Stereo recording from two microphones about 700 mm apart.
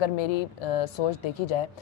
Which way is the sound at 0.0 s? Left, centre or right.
Left.